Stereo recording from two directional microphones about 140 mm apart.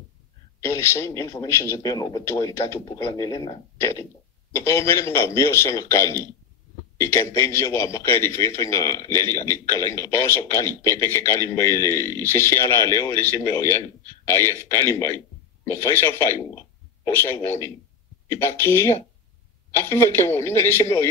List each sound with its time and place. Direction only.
0.6 s a man's voice: 20° left (ahead or behind)
3.7 s a man's voice: 20° left (ahead or behind)